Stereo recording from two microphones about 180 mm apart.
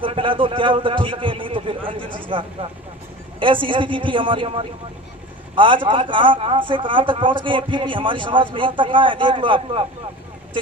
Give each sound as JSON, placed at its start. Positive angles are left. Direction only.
{"t": 0.0, "sound": "a man's voice", "side_deg": -30}
{"t": 3.4, "sound": "a man's voice", "side_deg": -30}